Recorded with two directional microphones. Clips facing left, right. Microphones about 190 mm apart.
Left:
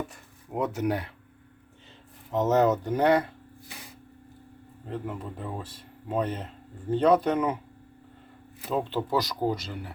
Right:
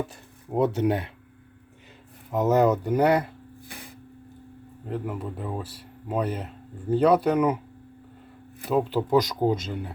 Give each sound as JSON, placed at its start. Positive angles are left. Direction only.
{"t": 0.5, "sound": "speech", "side_deg": -30}
{"t": 2.3, "sound": "speech", "side_deg": -10}
{"t": 4.9, "sound": "speech", "side_deg": -5}
{"t": 8.7, "sound": "speech", "side_deg": -10}